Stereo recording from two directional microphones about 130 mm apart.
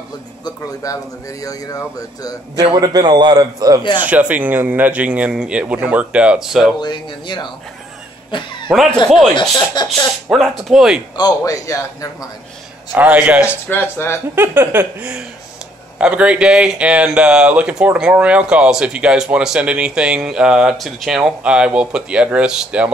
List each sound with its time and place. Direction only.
0.8 s a man's voice: 25° left (ahead or behind)
2.6 s a man's voice: 35° right (ahead or behind)
4.0 s speech: 10° right (ahead or behind)
6.8 s speech: 35° left (ahead or behind)
8.3 s cough: 40° left (ahead or behind)
9.3 s speech: 35° left (ahead or behind)
10.3 s speech: 5° right (ahead or behind)
11.1 s a man's voice: 30° left (ahead or behind)
12.9 s speech: 10° right (ahead or behind)
13.7 s a man's voice: 20° left (ahead or behind)
14.3 s speech: 15° right (ahead or behind)